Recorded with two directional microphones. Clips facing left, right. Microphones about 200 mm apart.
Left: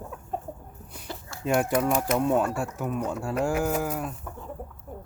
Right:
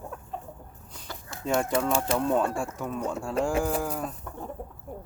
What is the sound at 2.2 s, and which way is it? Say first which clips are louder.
Speech: left 1 dB; 5° left (ahead or behind).